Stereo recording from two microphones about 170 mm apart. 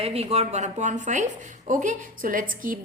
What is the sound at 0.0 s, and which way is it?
A woman's voice, 35° right (ahead or behind).